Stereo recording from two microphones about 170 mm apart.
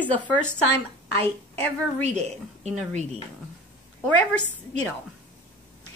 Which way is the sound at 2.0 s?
40° right (ahead or behind).